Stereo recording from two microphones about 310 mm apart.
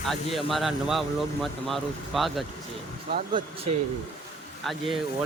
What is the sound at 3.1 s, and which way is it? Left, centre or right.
Speech, right.